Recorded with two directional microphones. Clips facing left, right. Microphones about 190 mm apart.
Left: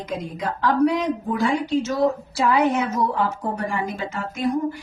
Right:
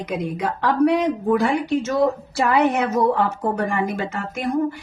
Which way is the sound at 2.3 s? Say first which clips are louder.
Even; 60° right (ahead or behind).